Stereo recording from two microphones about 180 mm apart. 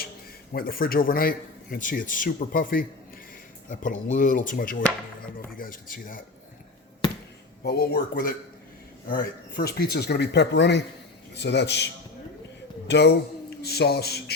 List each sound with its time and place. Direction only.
0.5 s a man's voice: 55° left (ahead or behind)
7.6 s speech: 65° left (ahead or behind)
9.0 s speech: 50° left (ahead or behind); by 11.9 s 70° left (ahead or behind)
12.9 s speech: 70° left (ahead or behind)